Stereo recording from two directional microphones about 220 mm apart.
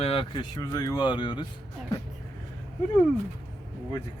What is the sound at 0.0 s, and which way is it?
Speech, 25° left (ahead or behind).